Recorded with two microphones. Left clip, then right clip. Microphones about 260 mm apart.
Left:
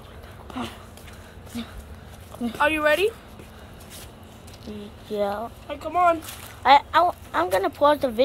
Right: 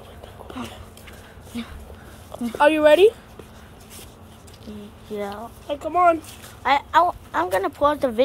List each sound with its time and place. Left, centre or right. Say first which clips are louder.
1.5 s speech: right 2 dB; centre
2.6 s speech: right 6 dB; right
4.6 s speech: left 2 dB; centre
5.7 s speech: right 3 dB; right
6.6 s speech: left 1 dB; centre